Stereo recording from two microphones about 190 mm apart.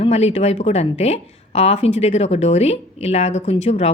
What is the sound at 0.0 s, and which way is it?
A woman's voice, 35° left (ahead or behind).